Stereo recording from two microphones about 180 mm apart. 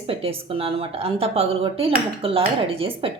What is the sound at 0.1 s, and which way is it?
A woman's voice, 30° right (ahead or behind).